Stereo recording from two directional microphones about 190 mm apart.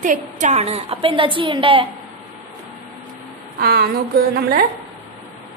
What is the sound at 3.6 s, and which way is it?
Speech, 55° right (ahead or behind).